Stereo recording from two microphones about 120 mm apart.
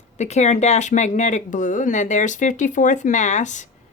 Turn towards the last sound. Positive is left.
turn(degrees=85)